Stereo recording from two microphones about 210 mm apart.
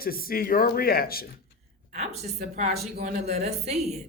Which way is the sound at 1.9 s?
30° right (ahead or behind).